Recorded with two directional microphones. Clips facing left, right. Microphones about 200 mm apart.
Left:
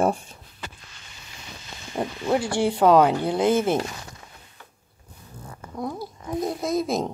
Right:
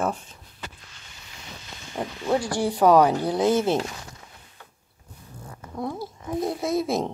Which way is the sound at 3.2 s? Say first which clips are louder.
Even; 20° left (ahead or behind).